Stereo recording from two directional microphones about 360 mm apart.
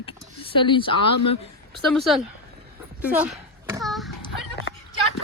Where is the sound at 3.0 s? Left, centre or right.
Centre.